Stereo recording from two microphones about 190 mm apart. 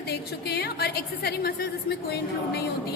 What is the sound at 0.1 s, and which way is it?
A woman's voice, 60° left (ahead or behind).